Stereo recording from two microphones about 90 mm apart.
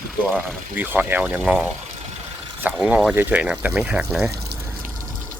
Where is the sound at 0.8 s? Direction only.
20° right (ahead or behind).